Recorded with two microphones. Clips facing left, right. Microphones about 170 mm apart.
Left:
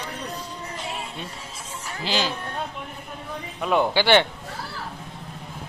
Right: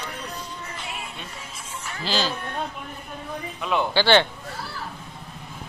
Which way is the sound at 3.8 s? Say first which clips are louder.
Even; 15° left (ahead or behind).